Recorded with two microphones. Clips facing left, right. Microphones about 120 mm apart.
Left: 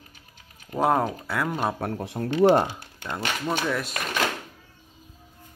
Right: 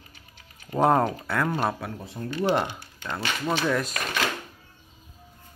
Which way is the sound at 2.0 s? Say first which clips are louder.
Left 9 dB; 85° left.